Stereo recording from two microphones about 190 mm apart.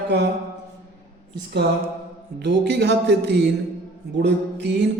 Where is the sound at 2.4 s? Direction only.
65° right (ahead or behind).